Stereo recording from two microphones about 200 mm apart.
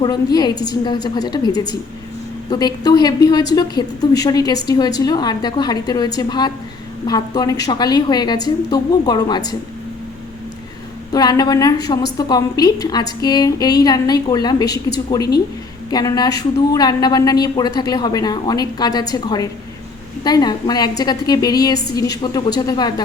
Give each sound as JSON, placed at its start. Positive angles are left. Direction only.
{"t": 0.0, "sound": "a woman's voice", "side_deg": 20}
{"t": 11.1, "sound": "a woman's voice", "side_deg": 20}